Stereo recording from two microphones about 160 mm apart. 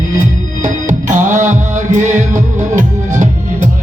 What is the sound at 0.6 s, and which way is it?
Music, 50° right (ahead or behind).